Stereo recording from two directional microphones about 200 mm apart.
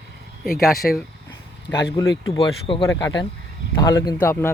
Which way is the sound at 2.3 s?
25° left (ahead or behind).